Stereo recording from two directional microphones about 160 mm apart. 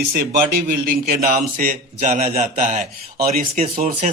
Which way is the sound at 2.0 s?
55° right (ahead or behind).